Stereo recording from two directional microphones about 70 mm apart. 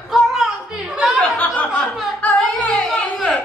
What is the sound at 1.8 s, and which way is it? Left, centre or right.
Speech, centre.